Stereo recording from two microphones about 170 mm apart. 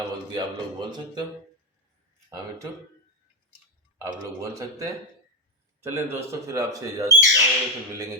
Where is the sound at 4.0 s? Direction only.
20° right (ahead or behind).